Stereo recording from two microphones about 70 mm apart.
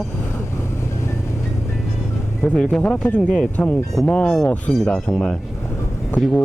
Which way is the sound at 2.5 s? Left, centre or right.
Centre.